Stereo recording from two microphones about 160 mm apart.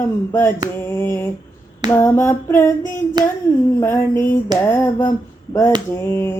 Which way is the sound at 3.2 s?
25° right (ahead or behind).